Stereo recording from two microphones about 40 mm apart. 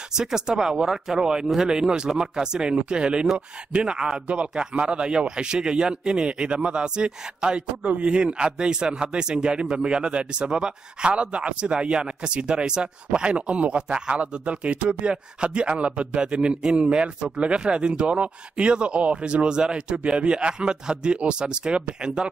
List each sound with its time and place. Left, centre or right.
0.1 s speech: centre